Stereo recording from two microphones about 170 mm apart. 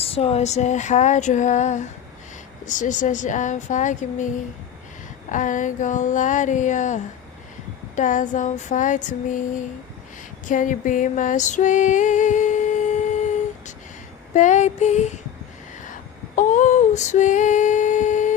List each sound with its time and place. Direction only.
0.0 s female singing: 35° left (ahead or behind)
5.3 s female singing: 50° left (ahead or behind)
14.3 s female singing: 45° left (ahead or behind)
16.3 s female singing: 50° left (ahead or behind)